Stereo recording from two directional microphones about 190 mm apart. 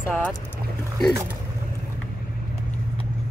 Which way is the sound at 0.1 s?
10° left (ahead or behind).